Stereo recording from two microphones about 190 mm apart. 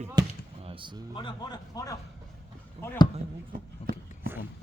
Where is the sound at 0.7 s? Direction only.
25° right (ahead or behind).